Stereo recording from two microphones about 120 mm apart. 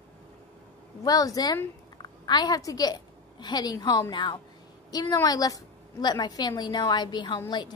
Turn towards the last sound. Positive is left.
turn(degrees=40)  # may be behind; listen again after turning